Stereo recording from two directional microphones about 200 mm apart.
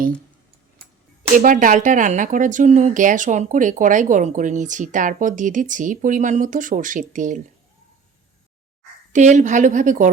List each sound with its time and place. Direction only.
1.3 s speech: 40° right (ahead or behind)
9.1 s speech: 40° right (ahead or behind)